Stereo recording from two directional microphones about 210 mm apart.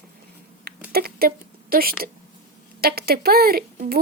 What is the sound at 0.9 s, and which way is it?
Speech, 45° right (ahead or behind).